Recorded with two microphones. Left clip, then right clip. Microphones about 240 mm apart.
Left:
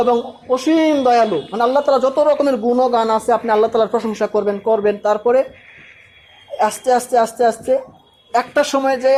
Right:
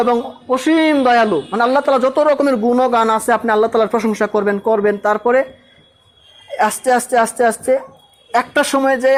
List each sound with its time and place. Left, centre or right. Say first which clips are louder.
0.5 s speech: right 1 dB; right
6.6 s speech: right 1 dB; right